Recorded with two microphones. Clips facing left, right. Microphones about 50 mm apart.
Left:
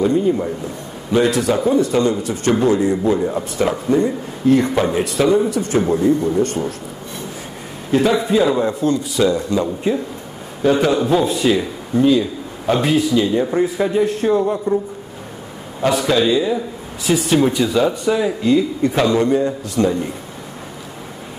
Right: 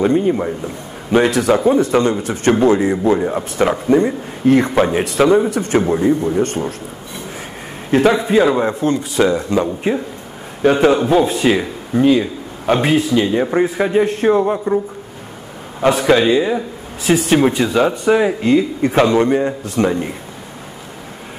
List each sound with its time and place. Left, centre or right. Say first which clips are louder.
0.0 s a man's voice: right 1 dB; right
4.7 s a man's voice: right 3 dB; right
5.0 s a man's voice: right 3 dB; right
5.9 s a man's voice: left 1 dB; right
7.9 s a man's voice: right 2 dB; right
15.8 s a man's voice: right 3 dB; right